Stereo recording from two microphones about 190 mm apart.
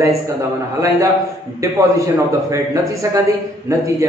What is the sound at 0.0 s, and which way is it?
A man's voice, 15° right (ahead or behind).